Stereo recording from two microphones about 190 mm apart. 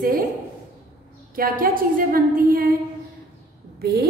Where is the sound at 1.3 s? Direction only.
50° right (ahead or behind).